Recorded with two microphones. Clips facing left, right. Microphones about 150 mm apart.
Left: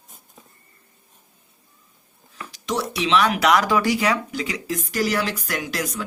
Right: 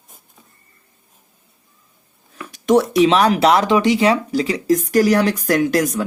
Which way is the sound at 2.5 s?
55° right (ahead or behind).